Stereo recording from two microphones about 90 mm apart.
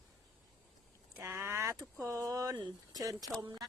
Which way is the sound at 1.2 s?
25° right (ahead or behind).